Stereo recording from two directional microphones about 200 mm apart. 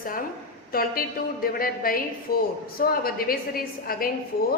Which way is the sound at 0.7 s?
50° left (ahead or behind).